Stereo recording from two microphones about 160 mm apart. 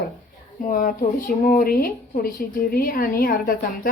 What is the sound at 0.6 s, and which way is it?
Speech, 60° left (ahead or behind).